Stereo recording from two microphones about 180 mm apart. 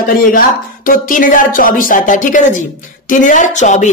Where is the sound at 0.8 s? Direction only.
50° left (ahead or behind).